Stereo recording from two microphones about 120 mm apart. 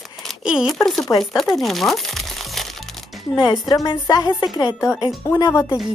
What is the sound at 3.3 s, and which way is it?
Speech, 40° left (ahead or behind).